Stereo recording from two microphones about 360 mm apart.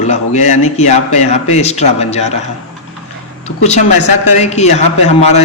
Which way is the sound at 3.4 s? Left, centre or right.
Centre.